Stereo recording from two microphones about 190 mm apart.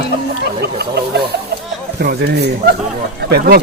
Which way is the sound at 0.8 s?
60° right (ahead or behind).